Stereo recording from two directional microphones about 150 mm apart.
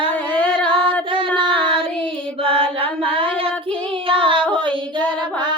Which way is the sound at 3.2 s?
35° right (ahead or behind).